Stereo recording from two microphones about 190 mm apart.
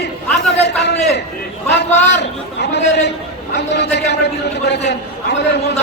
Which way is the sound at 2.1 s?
65° left (ahead or behind).